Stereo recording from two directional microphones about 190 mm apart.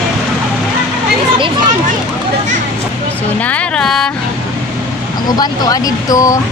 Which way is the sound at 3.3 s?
5° left (ahead or behind).